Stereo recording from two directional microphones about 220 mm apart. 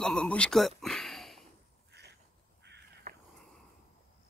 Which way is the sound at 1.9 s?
50° right (ahead or behind).